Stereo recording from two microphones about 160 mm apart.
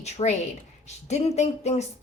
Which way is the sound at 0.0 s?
45° left (ahead or behind).